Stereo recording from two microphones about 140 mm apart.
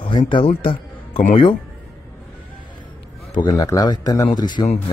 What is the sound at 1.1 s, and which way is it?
Speech, 75° left (ahead or behind).